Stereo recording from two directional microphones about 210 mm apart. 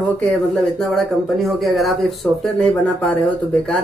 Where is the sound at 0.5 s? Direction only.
Centre (ahead or behind).